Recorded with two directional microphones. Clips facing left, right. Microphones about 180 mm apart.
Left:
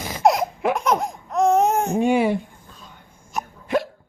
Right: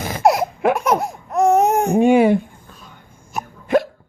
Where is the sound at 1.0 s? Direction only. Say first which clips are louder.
Right 3 dB; 10° right (ahead or behind).